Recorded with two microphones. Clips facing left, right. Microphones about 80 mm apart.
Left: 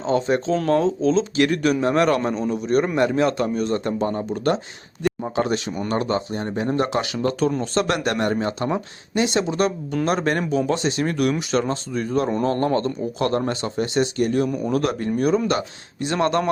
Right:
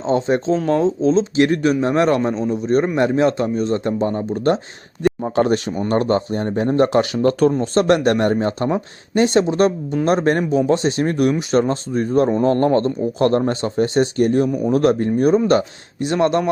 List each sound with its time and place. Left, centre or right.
0.0 s a man's voice: right
7.6 s a man's voice: right
14.4 s a man's voice: right
14.8 s speech: right